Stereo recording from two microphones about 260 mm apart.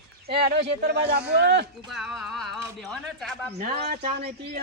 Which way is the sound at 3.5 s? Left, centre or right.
Right.